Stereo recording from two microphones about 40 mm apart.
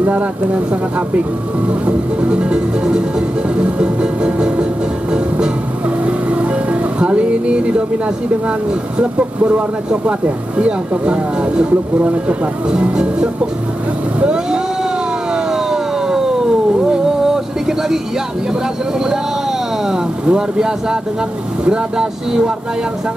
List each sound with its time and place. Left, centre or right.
1.7 s music: right
6.0 s music: right
8.9 s speech: right
12.9 s music: right
14.2 s vehicle: right
16.9 s music: centre
19.9 s speech: centre
21.6 s music: right